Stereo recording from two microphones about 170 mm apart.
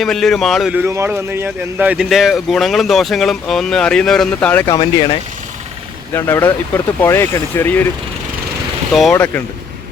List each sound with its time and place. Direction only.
0.0 s speech: centre (ahead or behind)
4.8 s speech: 25° left (ahead or behind)
6.1 s speech: 15° left (ahead or behind)
8.9 s speech: centre (ahead or behind)
9.1 s speech: 15° left (ahead or behind)